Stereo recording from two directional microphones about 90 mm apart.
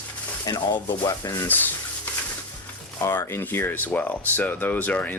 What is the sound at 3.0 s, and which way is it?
Speech, 30° left (ahead or behind).